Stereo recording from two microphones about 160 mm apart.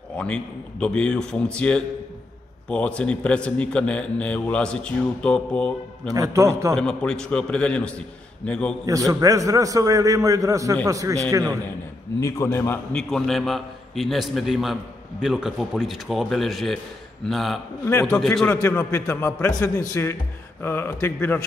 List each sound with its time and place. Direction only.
0.2 s a man's voice: 5° left (ahead or behind)
6.1 s a man's voice: 20° right (ahead or behind)
6.7 s a man's voice: 5° left (ahead or behind)
8.8 s a man's voice: 20° right (ahead or behind)
12.2 s a man's voice: 15° left (ahead or behind)
12.9 s a man's voice: centre (ahead or behind)
18.6 s a man's voice: 15° left (ahead or behind)